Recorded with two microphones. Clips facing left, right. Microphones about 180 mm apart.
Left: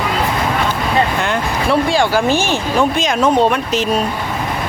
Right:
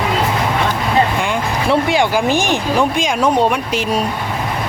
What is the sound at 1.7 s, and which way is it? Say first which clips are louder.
Speech: even; 20° right (ahead or behind).